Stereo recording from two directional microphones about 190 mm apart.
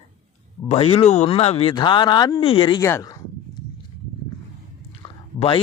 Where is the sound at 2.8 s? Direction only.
15° left (ahead or behind).